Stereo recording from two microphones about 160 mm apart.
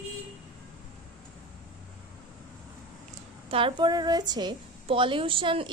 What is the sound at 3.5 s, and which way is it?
A woman's voice, 35° right (ahead or behind).